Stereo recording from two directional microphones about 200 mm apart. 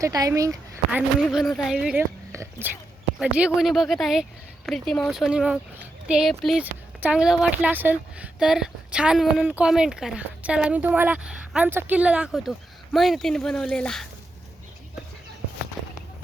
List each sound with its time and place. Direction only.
0.0 s speech: 15° right (ahead or behind)
0.9 s a woman's voice: centre (ahead or behind)